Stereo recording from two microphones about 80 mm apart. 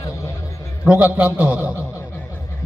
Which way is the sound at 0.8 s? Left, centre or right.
Centre.